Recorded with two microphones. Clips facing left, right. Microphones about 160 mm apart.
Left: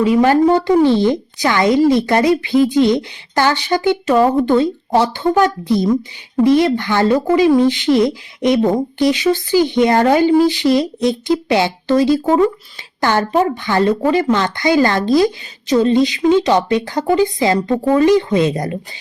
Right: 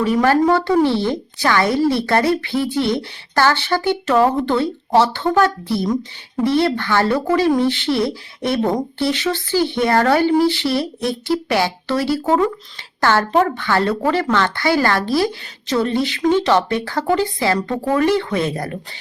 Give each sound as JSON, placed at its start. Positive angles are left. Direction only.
{"t": 0.0, "sound": "speech", "side_deg": 15}